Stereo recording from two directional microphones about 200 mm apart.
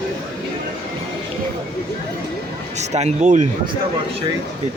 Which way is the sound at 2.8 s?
35° right (ahead or behind).